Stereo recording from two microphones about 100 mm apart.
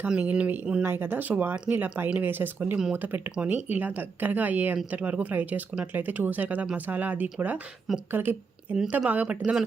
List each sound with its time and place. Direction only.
0.0 s a woman's voice: 15° right (ahead or behind)